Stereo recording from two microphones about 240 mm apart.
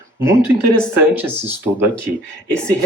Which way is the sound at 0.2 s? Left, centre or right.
Centre.